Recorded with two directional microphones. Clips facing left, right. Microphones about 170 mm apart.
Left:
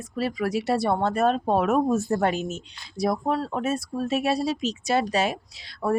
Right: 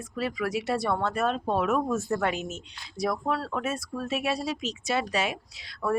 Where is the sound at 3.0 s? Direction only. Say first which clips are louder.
Left 4 dB; 35° left (ahead or behind).